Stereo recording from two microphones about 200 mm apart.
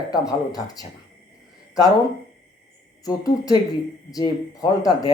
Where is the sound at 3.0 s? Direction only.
20° left (ahead or behind).